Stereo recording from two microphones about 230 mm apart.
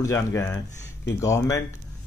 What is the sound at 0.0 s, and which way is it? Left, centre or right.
Speech, centre.